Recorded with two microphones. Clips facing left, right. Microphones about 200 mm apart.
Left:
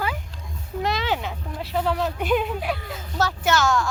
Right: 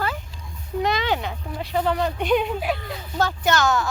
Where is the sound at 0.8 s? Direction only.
Centre (ahead or behind).